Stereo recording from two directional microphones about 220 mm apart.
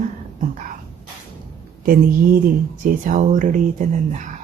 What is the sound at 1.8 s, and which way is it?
Speech, 40° right (ahead or behind).